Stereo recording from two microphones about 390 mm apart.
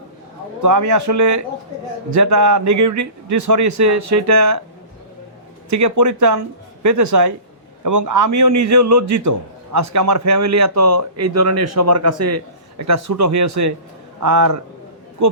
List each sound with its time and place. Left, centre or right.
0.6 s speech: right
5.7 s speech: right